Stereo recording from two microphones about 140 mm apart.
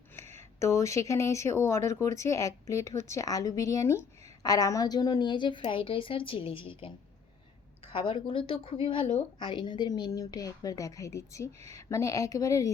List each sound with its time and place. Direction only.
0.6 s a woman's voice: 20° left (ahead or behind); by 6.9 s 40° left (ahead or behind)
7.9 s a woman's voice: 35° left (ahead or behind)
9.5 s speech: 35° left (ahead or behind)